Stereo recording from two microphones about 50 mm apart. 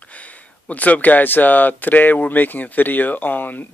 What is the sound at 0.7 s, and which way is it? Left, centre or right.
Speech, left.